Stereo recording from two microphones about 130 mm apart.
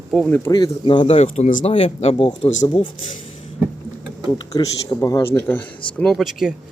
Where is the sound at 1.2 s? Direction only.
60° left (ahead or behind); by 2.9 s 40° left (ahead or behind).